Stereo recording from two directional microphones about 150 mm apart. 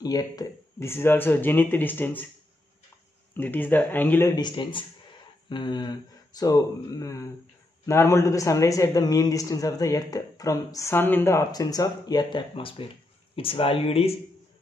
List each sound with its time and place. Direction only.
0.0 s speech: 25° left (ahead or behind)
3.3 s speech: 10° left (ahead or behind)
4.4 s a man's voice: 30° left (ahead or behind)